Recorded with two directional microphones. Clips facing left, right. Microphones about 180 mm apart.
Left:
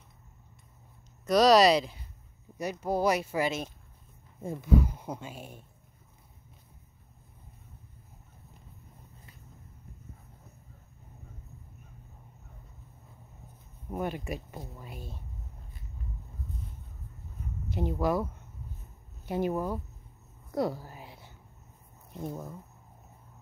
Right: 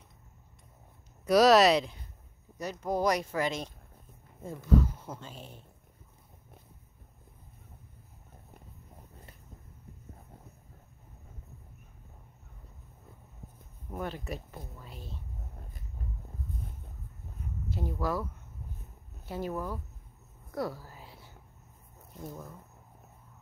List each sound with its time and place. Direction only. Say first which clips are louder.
1.2 s speech: even; 5° right (ahead or behind)
2.5 s speech: left 2 dB; 10° left (ahead or behind)
13.9 s speech: left 3 dB; 15° left (ahead or behind)
14.8 s a sound: left 3 dB; 15° left (ahead or behind)
17.6 s speech: left 4 dB; 20° left (ahead or behind)